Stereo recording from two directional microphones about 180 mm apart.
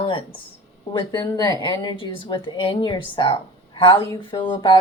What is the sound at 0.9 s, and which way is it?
Speech, 20° left (ahead or behind).